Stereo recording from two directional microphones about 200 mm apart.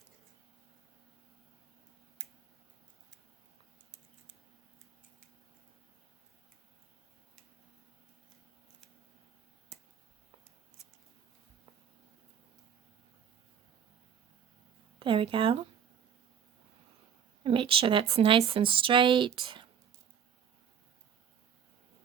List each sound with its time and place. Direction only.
9.7 s a sound: 5° right (ahead or behind)
14.9 s a woman's voice: 25° right (ahead or behind)
17.4 s a woman's voice: 25° right (ahead or behind)